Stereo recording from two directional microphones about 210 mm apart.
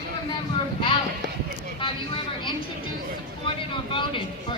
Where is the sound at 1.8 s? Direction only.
25° left (ahead or behind).